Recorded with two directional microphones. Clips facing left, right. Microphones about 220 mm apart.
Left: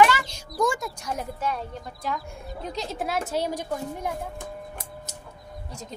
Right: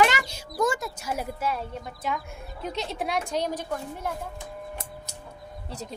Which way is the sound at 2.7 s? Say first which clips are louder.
Even; centre (ahead or behind).